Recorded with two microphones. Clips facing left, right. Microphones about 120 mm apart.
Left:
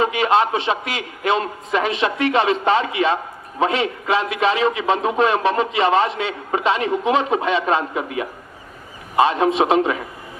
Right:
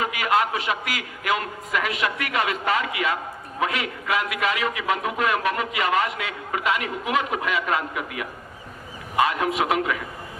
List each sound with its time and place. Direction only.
0.0 s a man's voice: 25° left (ahead or behind)